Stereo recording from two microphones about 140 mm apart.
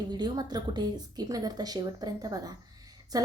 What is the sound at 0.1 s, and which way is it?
A woman's voice, 30° right (ahead or behind).